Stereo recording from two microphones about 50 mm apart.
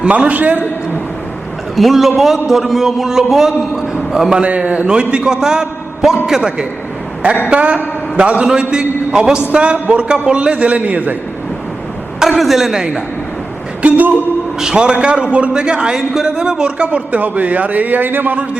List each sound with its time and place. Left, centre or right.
0.0 s a man's voice: right
1.7 s a man's voice: centre
4.4 s a man's voice: right
7.5 s a man's voice: right
12.4 s a man's voice: centre
13.8 s speech: right
14.6 s a man's voice: centre; by 18.4 s right